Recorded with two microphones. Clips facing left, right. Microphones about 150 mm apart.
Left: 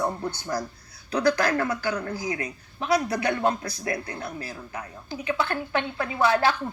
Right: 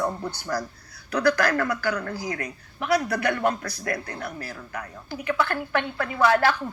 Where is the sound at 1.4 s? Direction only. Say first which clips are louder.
Right 1 dB; 25° left (ahead or behind).